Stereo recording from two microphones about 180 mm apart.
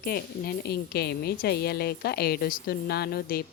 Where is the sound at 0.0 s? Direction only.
55° left (ahead or behind).